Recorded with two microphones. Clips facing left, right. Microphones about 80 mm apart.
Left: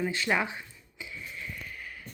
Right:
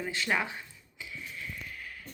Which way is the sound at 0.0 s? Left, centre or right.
Centre.